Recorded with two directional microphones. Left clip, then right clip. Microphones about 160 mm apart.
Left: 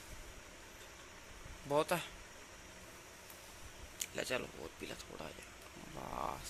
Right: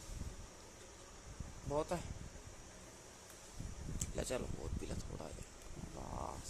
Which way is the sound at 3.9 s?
10° right (ahead or behind).